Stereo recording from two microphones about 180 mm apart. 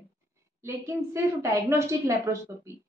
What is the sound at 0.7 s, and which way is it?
A woman's voice, 15° right (ahead or behind).